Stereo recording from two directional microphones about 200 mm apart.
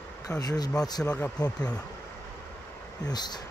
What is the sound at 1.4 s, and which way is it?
Speech, 20° left (ahead or behind).